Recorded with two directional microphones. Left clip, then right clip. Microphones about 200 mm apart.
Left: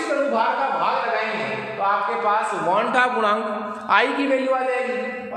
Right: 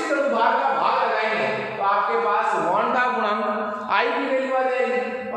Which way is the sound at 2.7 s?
55° left (ahead or behind).